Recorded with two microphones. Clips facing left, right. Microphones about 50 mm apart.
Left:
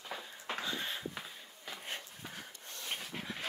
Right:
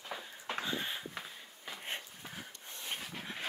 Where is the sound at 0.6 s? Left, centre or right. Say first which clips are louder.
Right 1 dB; centre.